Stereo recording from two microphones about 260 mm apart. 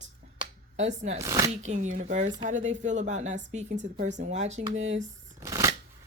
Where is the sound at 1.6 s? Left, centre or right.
Right.